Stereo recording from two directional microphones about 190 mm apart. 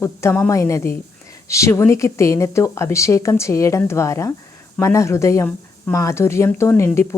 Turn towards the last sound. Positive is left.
turn(degrees=15)  # may be behind; listen again after turning